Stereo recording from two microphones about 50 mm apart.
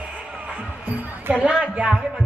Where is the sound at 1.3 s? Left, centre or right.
Right.